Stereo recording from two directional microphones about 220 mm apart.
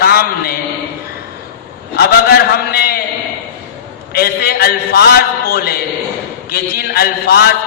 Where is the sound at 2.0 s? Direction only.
45° left (ahead or behind).